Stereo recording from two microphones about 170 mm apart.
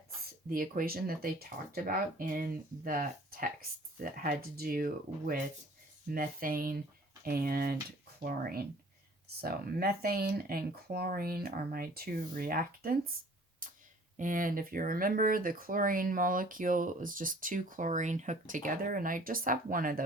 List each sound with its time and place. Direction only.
0.5 s speech: 55° right (ahead or behind)
14.2 s speech: 50° right (ahead or behind)